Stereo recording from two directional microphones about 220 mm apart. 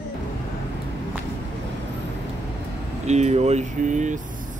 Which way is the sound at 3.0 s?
30° right (ahead or behind).